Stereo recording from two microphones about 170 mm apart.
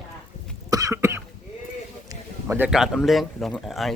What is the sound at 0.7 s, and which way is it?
Cough, 20° right (ahead or behind).